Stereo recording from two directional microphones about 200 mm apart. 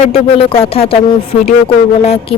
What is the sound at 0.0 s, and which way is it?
Speech, 30° left (ahead or behind).